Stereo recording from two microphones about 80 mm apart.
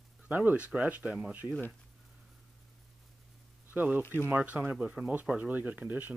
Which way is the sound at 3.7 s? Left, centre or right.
Right.